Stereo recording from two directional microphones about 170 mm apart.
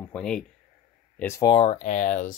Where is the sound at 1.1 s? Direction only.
15° left (ahead or behind).